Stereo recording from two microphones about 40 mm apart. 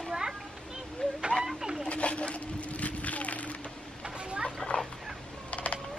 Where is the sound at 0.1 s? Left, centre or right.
Centre.